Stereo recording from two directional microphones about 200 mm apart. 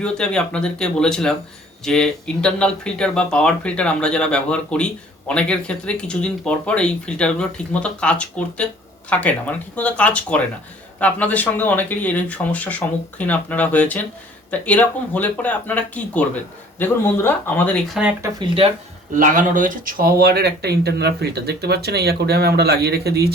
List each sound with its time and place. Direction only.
0.0 s speech: 5° left (ahead or behind)
17.8 s speech: centre (ahead or behind)
18.2 s speech: 25° right (ahead or behind)
19.1 s speech: 40° right (ahead or behind)